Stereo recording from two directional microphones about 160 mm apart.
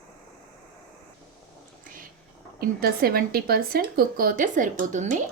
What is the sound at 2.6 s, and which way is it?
Speech, 70° right (ahead or behind).